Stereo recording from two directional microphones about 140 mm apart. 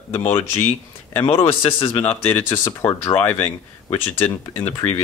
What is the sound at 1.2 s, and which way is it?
Speech, 40° left (ahead or behind).